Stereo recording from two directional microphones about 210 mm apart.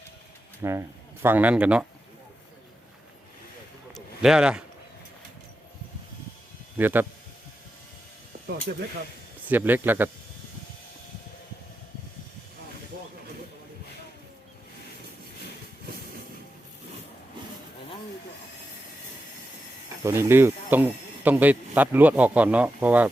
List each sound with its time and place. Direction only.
0.6 s speech: 15° right (ahead or behind)
3.9 s a sound: 5° right (ahead or behind)
6.7 s speech: 10° right (ahead or behind)
8.7 s speech: 55° right (ahead or behind)
9.5 s speech: 10° right (ahead or behind)
20.1 s speech: 10° right (ahead or behind)